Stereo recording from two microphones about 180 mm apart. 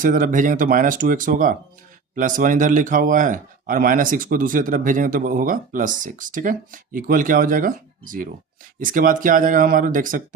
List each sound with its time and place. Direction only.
0.0 s speech: 50° right (ahead or behind)